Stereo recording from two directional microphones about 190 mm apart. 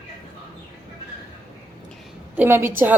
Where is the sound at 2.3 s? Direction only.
10° right (ahead or behind).